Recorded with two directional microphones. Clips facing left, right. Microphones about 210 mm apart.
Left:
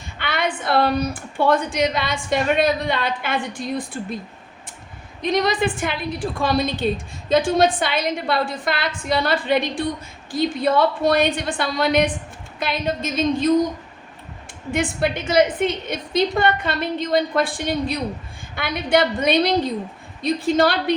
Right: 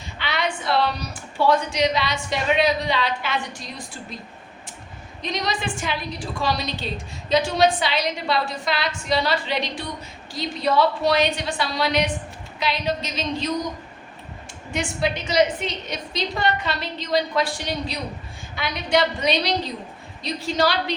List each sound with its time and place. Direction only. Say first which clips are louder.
0.2 s a woman's voice: left 2 dB; 55° left (ahead or behind)
5.2 s a woman's voice: left 7 dB; 55° left (ahead or behind)
14.7 s a woman's voice: left 3 dB; 55° left (ahead or behind)